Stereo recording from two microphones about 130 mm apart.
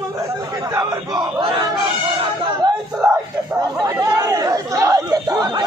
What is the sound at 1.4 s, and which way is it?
Battle cry, 40° right (ahead or behind).